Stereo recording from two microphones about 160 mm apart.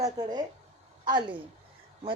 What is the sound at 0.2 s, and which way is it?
Speech, 25° right (ahead or behind).